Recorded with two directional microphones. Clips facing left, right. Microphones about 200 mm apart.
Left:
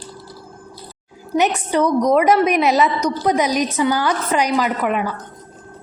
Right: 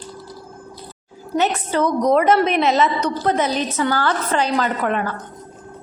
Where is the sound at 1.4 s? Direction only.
15° left (ahead or behind).